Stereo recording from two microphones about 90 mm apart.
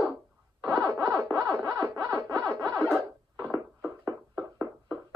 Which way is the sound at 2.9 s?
Centre (ahead or behind).